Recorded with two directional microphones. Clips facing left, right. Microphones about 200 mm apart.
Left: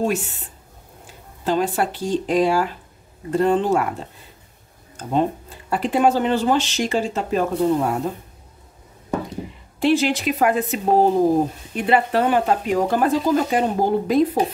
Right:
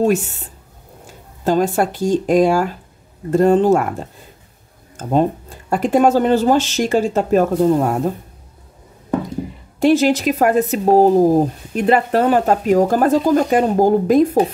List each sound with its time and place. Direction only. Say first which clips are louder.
0.0 s speech: right 6 dB; 45° right (ahead or behind)
1.4 s speech: right 5 dB; 45° right (ahead or behind)
5.0 s speech: right 4 dB; 45° right (ahead or behind)
9.8 s speech: right 5 dB; 45° right (ahead or behind)